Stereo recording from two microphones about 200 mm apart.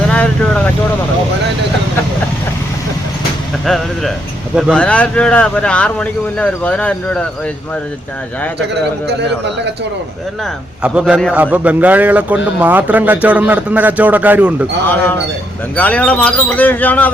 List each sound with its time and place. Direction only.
0.1 s vehicle: 5° left (ahead or behind)
3.7 s speech: centre (ahead or behind)
8.5 s a man's voice: 60° right (ahead or behind)
10.8 s speech: 5° right (ahead or behind)
14.9 s speech: 10° left (ahead or behind)